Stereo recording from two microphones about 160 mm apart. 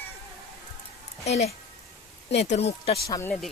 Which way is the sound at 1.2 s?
40° left (ahead or behind).